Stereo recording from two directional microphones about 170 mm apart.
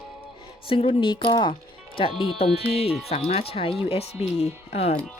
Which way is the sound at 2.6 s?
35° left (ahead or behind).